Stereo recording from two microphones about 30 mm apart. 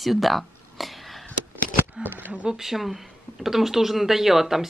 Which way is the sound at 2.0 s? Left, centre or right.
Right.